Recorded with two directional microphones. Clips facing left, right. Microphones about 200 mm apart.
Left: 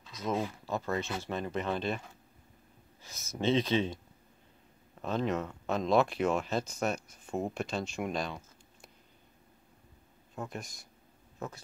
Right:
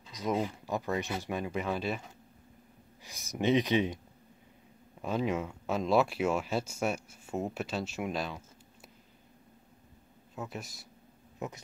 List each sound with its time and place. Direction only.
0.1 s a sound: 15° right (ahead or behind)
0.7 s speech: 15° right (ahead or behind)
5.0 s speech: 10° right (ahead or behind)
10.3 s speech: 5° right (ahead or behind)
11.3 s speech: 20° right (ahead or behind)